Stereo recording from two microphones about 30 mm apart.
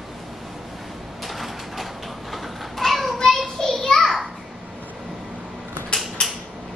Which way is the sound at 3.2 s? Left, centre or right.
Centre.